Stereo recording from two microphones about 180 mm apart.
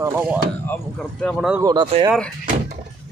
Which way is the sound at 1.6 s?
20° right (ahead or behind).